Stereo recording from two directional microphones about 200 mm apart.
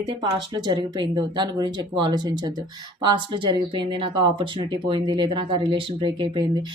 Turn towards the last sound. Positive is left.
turn(degrees=-25)  # may be behind; listen again after turning